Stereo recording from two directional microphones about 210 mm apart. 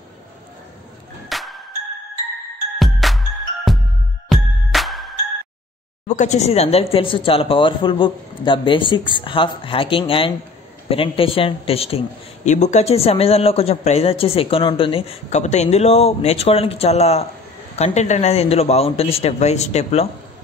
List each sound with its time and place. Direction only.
1.3 s music: centre (ahead or behind)
2.8 s music: centre (ahead or behind)
6.0 s speech: 35° left (ahead or behind)